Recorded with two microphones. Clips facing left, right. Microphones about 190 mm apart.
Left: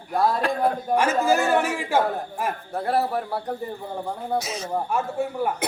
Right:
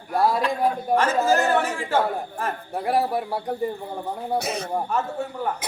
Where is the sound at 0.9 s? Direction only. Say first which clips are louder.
Even; 10° left (ahead or behind).